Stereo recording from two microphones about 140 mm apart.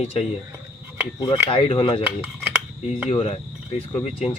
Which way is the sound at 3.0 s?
45° left (ahead or behind).